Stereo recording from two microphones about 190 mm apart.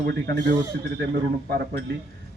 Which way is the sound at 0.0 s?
55° right (ahead or behind).